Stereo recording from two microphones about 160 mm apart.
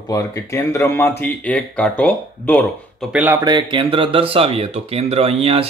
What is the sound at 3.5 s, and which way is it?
Speech, 30° right (ahead or behind).